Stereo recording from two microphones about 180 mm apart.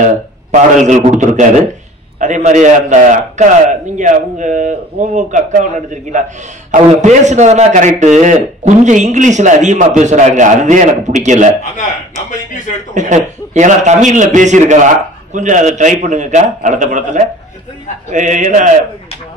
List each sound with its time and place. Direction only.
0.0 s a man's voice: 40° right (ahead or behind)
6.9 s speech: 40° right (ahead or behind)
12.9 s a man's voice: 40° right (ahead or behind)